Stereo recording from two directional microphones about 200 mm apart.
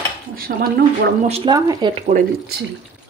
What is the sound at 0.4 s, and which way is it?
Speech, 50° right (ahead or behind).